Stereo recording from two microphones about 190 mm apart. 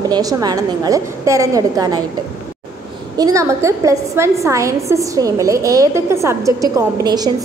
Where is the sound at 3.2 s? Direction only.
15° right (ahead or behind).